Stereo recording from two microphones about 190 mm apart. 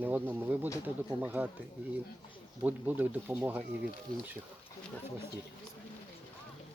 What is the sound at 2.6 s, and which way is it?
Speech, 10° right (ahead or behind).